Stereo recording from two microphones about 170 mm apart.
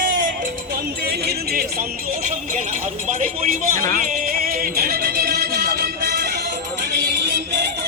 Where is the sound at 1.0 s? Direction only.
65° right (ahead or behind).